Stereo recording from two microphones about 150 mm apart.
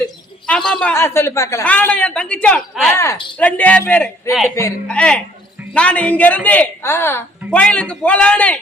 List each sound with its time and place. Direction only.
0.0 s a sound: 5° left (ahead or behind)
0.9 s a woman's voice: 15° left (ahead or behind)
2.9 s a woman's voice: 20° left (ahead or behind)